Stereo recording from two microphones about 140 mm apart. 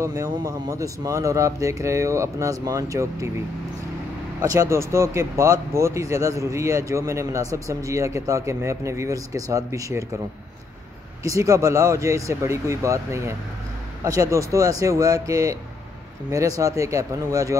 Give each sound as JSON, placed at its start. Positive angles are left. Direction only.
{"t": 0.0, "sound": "speech", "side_deg": -20}
{"t": 4.4, "sound": "speech", "side_deg": -20}
{"t": 11.2, "sound": "speech", "side_deg": -20}